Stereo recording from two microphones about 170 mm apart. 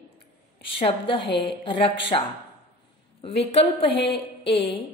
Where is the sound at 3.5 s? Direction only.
40° left (ahead or behind).